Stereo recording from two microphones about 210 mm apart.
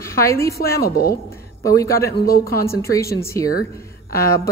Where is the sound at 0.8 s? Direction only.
45° left (ahead or behind).